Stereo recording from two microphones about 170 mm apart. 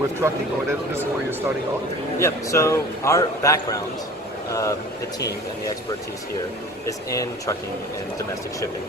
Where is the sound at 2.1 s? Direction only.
15° left (ahead or behind).